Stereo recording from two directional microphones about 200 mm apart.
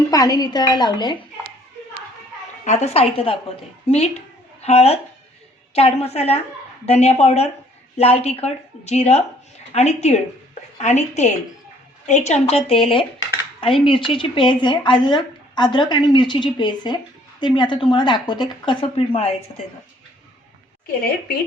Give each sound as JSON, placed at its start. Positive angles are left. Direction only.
{"t": 0.1, "sound": "speech", "side_deg": 20}
{"t": 2.6, "sound": "a woman's voice", "side_deg": 30}
{"t": 20.8, "sound": "speech", "side_deg": 50}